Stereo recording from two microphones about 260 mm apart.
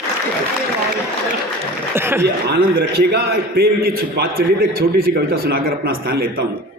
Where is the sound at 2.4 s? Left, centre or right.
Right.